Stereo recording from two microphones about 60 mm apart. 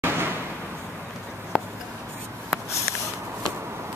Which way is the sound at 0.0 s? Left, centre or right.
Right.